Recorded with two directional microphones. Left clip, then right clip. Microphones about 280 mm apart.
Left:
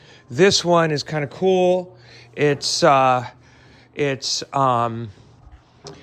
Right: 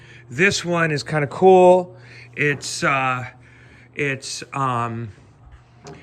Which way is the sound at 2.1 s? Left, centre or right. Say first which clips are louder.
Left 2 dB; centre.